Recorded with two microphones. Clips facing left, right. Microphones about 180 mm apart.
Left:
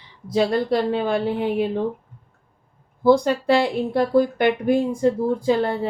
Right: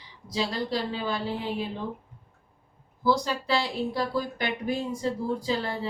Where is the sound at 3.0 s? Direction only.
55° left (ahead or behind).